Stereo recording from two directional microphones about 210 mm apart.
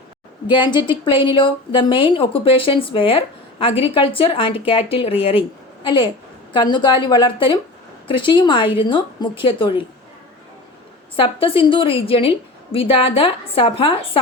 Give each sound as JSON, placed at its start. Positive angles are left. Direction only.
{"t": 0.4, "sound": "a woman's voice", "side_deg": 20}
{"t": 11.2, "sound": "a woman's voice", "side_deg": 25}